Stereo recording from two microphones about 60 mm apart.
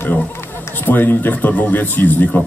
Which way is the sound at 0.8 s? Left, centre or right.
Left.